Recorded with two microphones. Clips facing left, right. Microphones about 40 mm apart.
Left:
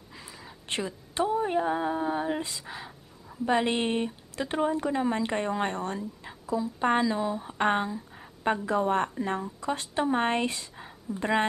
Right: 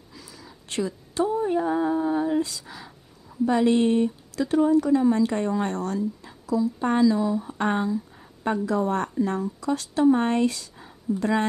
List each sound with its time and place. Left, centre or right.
0.1 s a woman's voice: left